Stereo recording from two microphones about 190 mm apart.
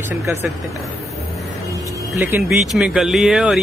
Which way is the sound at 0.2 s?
15° right (ahead or behind).